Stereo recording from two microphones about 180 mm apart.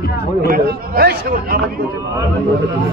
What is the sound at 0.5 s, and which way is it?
A man's voice, 60° right (ahead or behind).